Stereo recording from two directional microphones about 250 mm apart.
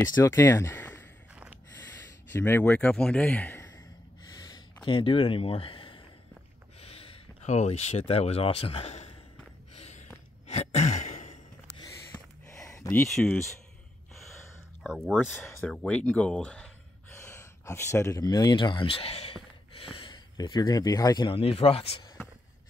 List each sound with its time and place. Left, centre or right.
0.1 s speech: centre
1.3 s snort: centre
2.3 s speech: centre
4.3 s a sound: centre
4.8 s speech: left
9.8 s a sound: left
12.1 s a sound: centre
13.1 s speech: centre
14.8 s speech: centre; by 22.0 s left